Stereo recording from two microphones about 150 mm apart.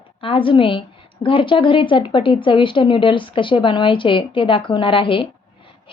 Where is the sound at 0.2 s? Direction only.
35° left (ahead or behind).